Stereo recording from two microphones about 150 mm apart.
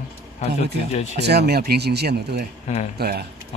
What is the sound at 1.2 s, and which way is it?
Speech, 90° right.